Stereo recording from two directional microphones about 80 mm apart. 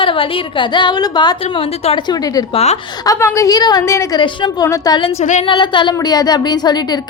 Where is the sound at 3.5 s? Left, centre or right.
Left.